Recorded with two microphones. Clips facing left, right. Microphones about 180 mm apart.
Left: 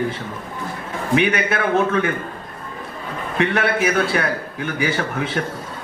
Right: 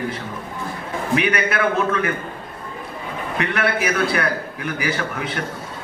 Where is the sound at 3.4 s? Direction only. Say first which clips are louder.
Left 3 dB; 30° left (ahead or behind).